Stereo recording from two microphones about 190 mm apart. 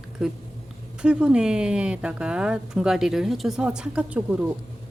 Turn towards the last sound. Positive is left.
turn(degrees=-5)  # may be behind; listen again after turning